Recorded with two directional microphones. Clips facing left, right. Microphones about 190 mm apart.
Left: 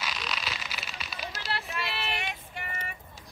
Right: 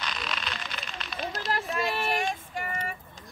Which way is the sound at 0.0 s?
Centre (ahead or behind).